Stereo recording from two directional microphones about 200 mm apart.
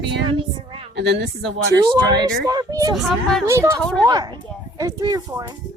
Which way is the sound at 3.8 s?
5° left (ahead or behind).